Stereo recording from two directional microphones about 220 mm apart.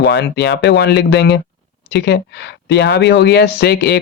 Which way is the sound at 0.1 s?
50° left (ahead or behind).